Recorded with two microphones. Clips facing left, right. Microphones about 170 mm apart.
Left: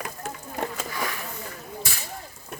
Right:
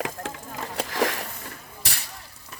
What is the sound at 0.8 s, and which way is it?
Bee, 90° right.